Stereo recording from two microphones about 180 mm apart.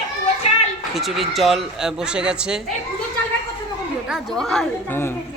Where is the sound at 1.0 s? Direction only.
Centre (ahead or behind).